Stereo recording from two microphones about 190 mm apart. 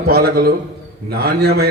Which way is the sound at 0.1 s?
55° right (ahead or behind).